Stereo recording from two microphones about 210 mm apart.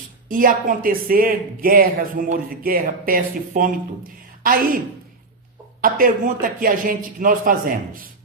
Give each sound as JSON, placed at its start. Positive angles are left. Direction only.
{"t": 0.3, "sound": "a man's voice", "side_deg": -40}
{"t": 5.8, "sound": "a man's voice", "side_deg": -40}